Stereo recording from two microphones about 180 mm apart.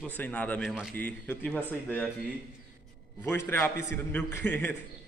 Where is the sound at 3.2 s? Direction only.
10° left (ahead or behind).